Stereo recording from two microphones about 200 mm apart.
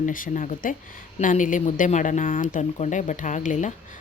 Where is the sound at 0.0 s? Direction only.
40° left (ahead or behind).